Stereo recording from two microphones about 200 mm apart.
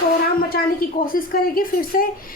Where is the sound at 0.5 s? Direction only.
45° left (ahead or behind).